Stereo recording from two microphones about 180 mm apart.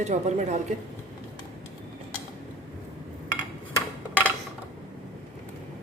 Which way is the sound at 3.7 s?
10° right (ahead or behind).